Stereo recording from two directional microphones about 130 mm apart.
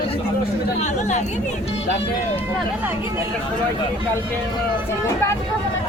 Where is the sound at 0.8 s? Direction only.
65° left (ahead or behind).